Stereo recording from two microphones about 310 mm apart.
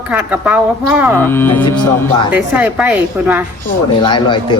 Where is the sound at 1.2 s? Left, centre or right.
Centre.